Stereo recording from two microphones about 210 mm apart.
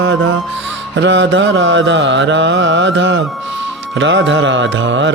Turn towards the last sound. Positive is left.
turn(degrees=-60)  # may be behind; listen again after turning